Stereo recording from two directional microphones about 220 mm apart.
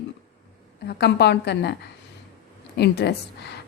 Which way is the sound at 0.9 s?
50° left (ahead or behind).